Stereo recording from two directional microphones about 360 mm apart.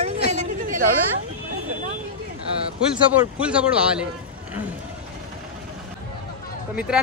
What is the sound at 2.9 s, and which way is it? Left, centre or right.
Speech, centre.